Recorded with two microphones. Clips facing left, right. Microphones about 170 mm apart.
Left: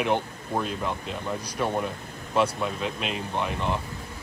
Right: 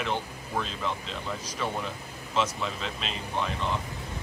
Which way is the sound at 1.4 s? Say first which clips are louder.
Left 6 dB; 10° left (ahead or behind).